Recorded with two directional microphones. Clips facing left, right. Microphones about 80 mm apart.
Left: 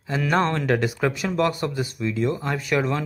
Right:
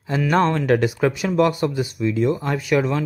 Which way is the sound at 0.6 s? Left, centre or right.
Centre.